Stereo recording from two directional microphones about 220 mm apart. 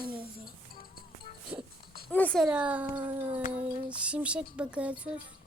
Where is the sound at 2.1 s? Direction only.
5° left (ahead or behind).